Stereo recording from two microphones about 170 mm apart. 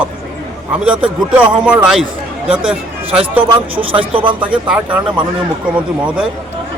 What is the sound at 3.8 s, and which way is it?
Speech, 35° right (ahead or behind).